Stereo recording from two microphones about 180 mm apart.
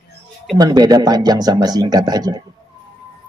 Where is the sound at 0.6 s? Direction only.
20° right (ahead or behind).